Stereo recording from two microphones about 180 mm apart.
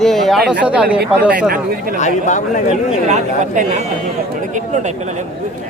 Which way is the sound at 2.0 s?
40° left (ahead or behind).